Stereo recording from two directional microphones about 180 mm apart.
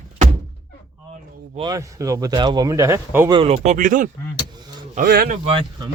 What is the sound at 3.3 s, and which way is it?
Speech, 30° right (ahead or behind).